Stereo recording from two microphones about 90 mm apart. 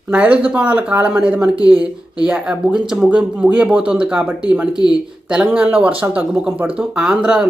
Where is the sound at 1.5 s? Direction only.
45° left (ahead or behind).